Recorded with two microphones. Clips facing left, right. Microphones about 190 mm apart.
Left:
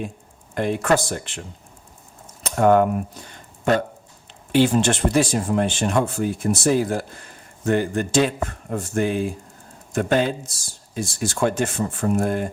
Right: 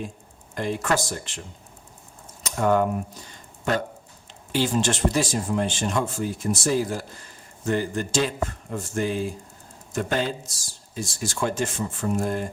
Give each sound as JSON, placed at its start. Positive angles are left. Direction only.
{"t": 0.5, "sound": "speech", "side_deg": 60}
{"t": 2.4, "sound": "a sound", "side_deg": 60}
{"t": 4.5, "sound": "speech", "side_deg": 60}